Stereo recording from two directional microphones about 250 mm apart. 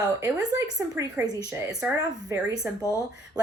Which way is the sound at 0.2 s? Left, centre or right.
Centre.